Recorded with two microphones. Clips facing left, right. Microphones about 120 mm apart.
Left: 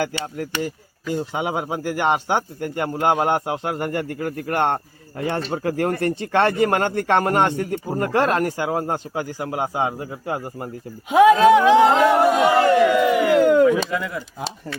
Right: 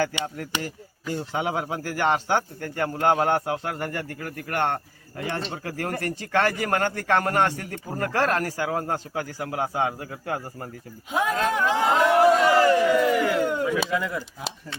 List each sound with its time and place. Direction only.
0.6 s speech: 15° left (ahead or behind)
11.1 s speech: 80° left
11.9 s a sound: 70° left (ahead or behind)
12.9 s speech: 15° left (ahead or behind)
13.3 s a sound: 90° left
13.7 s speech: 5° right (ahead or behind)